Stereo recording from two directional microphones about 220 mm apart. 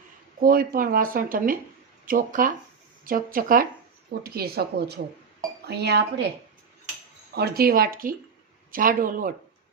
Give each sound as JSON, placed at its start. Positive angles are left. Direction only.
{"t": 0.4, "sound": "speech", "side_deg": -40}
{"t": 7.3, "sound": "speech", "side_deg": -45}